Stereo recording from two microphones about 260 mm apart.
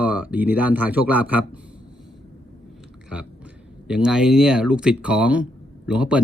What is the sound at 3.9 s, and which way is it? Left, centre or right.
Speech, centre.